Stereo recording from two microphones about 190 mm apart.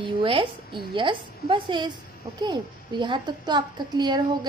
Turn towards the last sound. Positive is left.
turn(degrees=-20)  # may be behind; listen again after turning